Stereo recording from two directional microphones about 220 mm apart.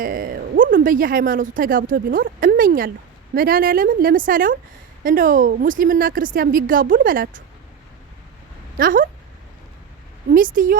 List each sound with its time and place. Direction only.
0.0 s a woman's voice: 40° right (ahead or behind)
8.8 s a woman's voice: 40° right (ahead or behind)
10.3 s a woman's voice: 40° right (ahead or behind)